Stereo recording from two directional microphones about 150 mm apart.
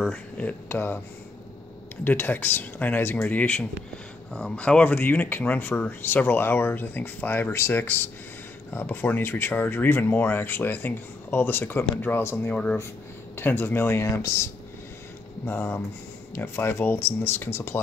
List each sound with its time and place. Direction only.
0.0 s speech: 5° left (ahead or behind)
2.0 s speech: 15° left (ahead or behind)